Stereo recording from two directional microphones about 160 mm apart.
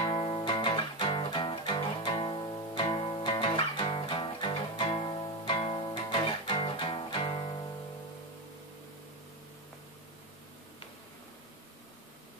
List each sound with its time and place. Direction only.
0.0 s music: 35° left (ahead or behind)